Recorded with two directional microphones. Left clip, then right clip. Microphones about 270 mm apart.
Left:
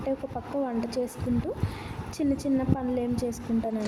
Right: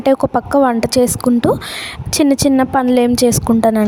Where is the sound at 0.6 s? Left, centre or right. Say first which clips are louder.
Right 17 dB; right.